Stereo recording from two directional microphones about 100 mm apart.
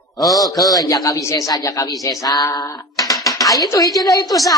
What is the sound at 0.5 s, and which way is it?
Speech, 35° left (ahead or behind).